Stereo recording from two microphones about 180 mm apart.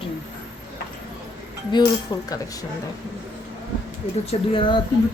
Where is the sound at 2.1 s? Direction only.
25° left (ahead or behind).